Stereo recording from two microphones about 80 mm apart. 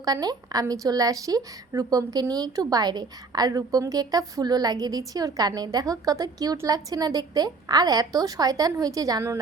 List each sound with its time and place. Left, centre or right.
0.0 s a woman's voice: right